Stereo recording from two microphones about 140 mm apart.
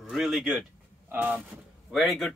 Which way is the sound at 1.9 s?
Centre (ahead or behind).